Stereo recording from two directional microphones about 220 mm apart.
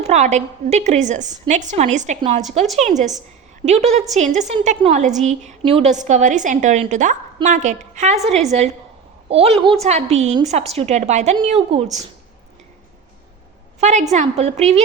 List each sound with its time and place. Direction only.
0.0 s a woman's voice: 30° right (ahead or behind)
13.7 s a woman's voice: 30° right (ahead or behind)